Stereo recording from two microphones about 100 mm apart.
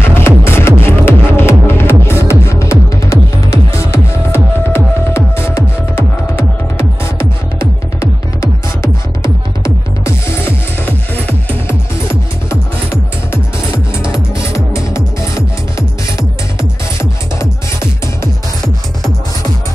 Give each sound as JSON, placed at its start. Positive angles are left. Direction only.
{"t": 0.0, "sound": "music", "side_deg": 25}
{"t": 8.4, "sound": "music", "side_deg": 30}
{"t": 10.9, "sound": "music", "side_deg": 15}
{"t": 14.1, "sound": "music", "side_deg": 30}